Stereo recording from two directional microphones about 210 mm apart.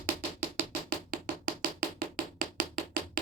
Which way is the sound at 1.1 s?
40° right (ahead or behind).